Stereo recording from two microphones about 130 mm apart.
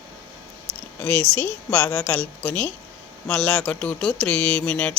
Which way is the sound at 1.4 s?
10° left (ahead or behind).